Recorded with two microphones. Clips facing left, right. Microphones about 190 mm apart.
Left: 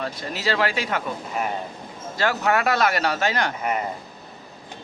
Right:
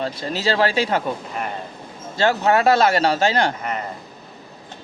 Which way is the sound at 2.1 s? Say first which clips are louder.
Right 4 dB; 25° right (ahead or behind).